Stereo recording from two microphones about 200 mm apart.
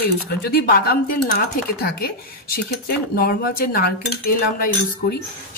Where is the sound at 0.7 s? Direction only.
50° left (ahead or behind).